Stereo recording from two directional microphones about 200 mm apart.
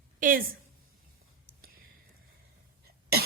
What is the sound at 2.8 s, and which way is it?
Cough, 50° right (ahead or behind).